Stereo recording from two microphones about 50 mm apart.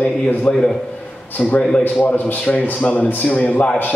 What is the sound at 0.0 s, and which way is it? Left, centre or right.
Speech, left.